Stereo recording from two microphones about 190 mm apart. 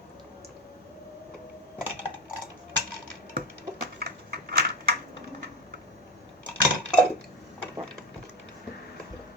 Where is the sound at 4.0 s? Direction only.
55° right (ahead or behind).